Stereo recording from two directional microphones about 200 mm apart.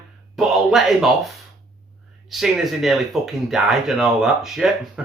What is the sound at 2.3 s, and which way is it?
Speech, centre (ahead or behind).